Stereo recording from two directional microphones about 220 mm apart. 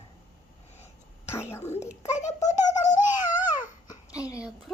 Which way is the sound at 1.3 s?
10° left (ahead or behind).